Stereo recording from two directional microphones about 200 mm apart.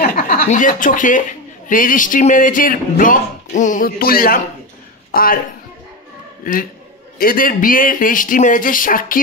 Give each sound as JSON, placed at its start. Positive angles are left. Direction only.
{"t": 0.0, "sound": "speech", "side_deg": 45}
{"t": 6.5, "sound": "speech", "side_deg": 45}